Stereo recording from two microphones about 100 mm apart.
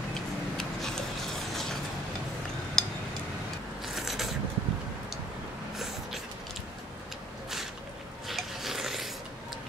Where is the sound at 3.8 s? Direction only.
Centre (ahead or behind).